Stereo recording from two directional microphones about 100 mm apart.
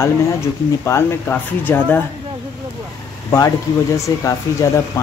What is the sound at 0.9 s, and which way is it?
Speech, 30° left (ahead or behind).